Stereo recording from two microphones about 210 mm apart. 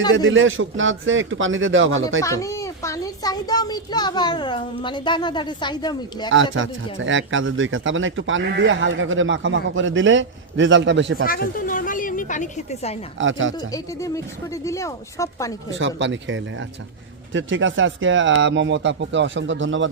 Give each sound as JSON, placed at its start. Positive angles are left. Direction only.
{"t": 0.3, "sound": "speech", "side_deg": -65}
{"t": 2.2, "sound": "a child's voice", "side_deg": 15}
{"t": 6.3, "sound": "speech", "side_deg": -65}
{"t": 11.3, "sound": "a woman's voice", "side_deg": 40}
{"t": 13.1, "sound": "speech", "side_deg": -65}
{"t": 13.7, "sound": "speech", "side_deg": 15}
{"t": 15.7, "sound": "speech", "side_deg": -60}